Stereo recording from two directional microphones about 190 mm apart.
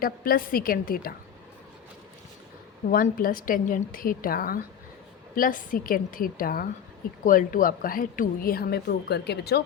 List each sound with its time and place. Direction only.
0.0 s a woman's voice: 50° left (ahead or behind)
2.9 s a woman's voice: 50° left (ahead or behind)